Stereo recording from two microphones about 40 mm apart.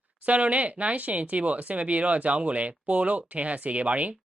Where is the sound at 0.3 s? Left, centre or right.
Right.